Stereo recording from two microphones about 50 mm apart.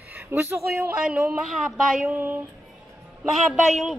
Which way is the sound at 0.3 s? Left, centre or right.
Right.